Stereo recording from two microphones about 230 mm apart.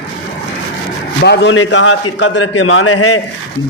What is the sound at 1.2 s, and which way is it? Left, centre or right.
A man's voice, left.